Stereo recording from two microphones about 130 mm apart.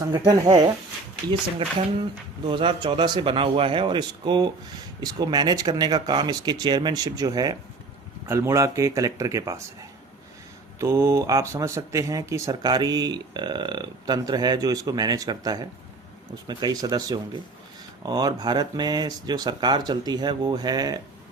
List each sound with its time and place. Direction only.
0.3 s speech: 30° right (ahead or behind)
10.8 s speech: 20° right (ahead or behind)